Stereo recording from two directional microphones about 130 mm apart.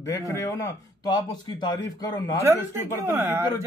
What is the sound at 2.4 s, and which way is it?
Speech, 20° right (ahead or behind).